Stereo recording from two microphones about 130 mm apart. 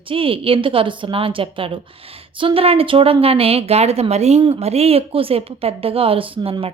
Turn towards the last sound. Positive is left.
turn(degrees=-45)  # may be behind; listen again after turning